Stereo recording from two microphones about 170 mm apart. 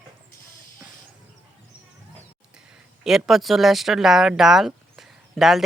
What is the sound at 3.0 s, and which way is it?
Speech, 5° right (ahead or behind).